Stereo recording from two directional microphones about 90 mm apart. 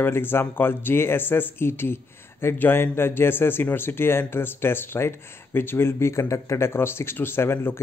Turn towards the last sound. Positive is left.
turn(degrees=25)  # may be behind; listen again after turning